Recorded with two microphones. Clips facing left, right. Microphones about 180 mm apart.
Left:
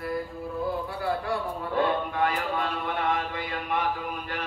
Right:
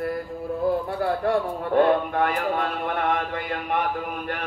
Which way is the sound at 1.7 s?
50° right (ahead or behind).